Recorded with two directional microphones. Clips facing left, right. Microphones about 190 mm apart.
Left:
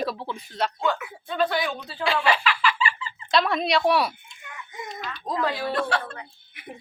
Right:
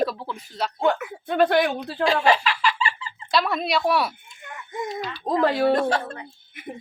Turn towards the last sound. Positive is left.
turn(degrees=-45)  # may be behind; listen again after turning